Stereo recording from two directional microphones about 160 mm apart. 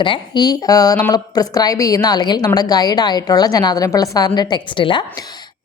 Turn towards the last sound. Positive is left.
turn(degrees=30)  # may be behind; listen again after turning